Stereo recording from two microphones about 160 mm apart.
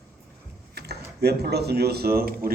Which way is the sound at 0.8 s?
90° right.